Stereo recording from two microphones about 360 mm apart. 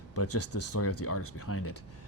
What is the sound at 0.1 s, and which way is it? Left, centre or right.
Speech, left.